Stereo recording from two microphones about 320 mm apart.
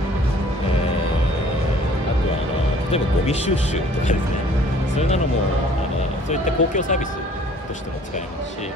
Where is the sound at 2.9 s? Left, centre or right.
Left.